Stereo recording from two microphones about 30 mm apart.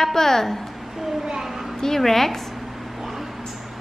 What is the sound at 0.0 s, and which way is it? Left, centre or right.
Speech, centre.